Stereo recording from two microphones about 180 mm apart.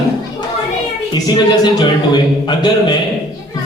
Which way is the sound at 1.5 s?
25° left (ahead or behind).